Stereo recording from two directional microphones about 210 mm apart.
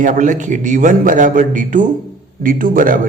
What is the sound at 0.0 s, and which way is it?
A man's voice, 40° right (ahead or behind).